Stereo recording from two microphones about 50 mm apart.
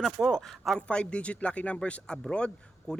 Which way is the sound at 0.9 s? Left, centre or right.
Left.